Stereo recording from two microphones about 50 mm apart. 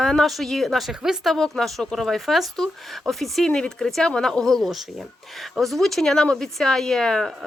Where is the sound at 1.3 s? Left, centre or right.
Centre.